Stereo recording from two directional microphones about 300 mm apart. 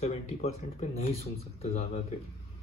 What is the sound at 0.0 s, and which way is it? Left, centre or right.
Speech, left.